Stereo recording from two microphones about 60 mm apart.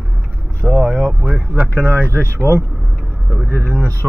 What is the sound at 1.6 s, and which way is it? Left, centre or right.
Speech, left.